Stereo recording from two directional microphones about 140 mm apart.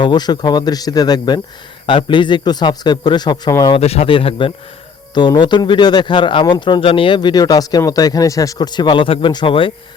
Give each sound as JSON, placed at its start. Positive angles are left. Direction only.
{"t": 0.0, "sound": "a man's voice", "side_deg": 30}
{"t": 3.8, "sound": "a man's voice", "side_deg": 45}